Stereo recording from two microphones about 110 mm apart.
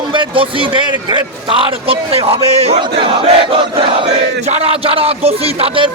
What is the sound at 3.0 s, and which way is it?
Battle cry, 55° right (ahead or behind).